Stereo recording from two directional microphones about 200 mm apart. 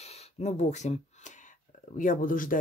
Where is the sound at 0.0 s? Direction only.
30° left (ahead or behind).